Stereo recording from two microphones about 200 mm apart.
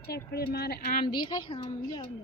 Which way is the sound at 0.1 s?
50° left (ahead or behind).